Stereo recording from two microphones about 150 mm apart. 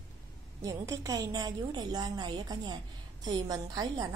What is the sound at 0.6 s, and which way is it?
A woman's voice, 20° right (ahead or behind).